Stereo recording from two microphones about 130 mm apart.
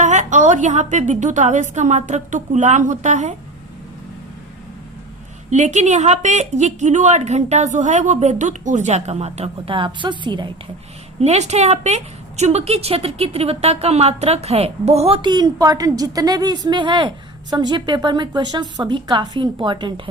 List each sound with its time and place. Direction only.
0.0 s a woman's voice: 65° right (ahead or behind)
5.5 s a woman's voice: 65° right (ahead or behind); by 10.5 s 35° right (ahead or behind)
11.2 s a woman's voice: 55° right (ahead or behind); by 19.9 s 40° right (ahead or behind)